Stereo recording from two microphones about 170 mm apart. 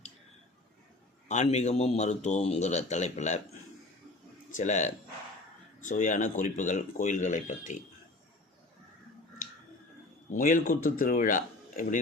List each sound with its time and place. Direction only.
1.3 s a man's voice: 45° left (ahead or behind)
4.5 s a man's voice: 45° left (ahead or behind)
10.2 s a man's voice: 50° left (ahead or behind)